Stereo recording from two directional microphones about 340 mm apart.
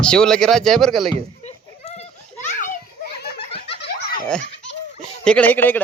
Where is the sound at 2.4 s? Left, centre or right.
Left.